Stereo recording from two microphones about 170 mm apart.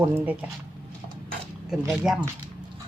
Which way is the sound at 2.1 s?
5° right (ahead or behind).